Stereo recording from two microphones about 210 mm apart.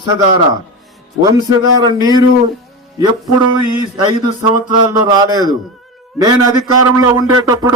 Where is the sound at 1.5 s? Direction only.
20° right (ahead or behind).